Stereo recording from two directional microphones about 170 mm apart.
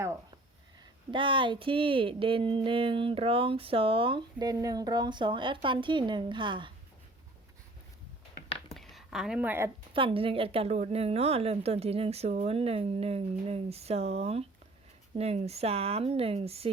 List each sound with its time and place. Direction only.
1.1 s speech: 30° right (ahead or behind)
8.7 s a sound: centre (ahead or behind)
9.9 s a woman's voice: 30° right (ahead or behind)